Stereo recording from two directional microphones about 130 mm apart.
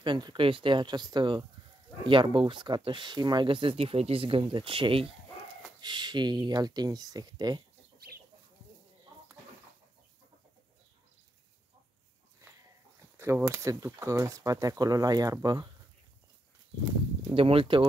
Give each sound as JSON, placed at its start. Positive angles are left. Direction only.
{"t": 0.0, "sound": "speech", "side_deg": -35}
{"t": 13.2, "sound": "speech", "side_deg": -20}
{"t": 17.3, "sound": "speech", "side_deg": -45}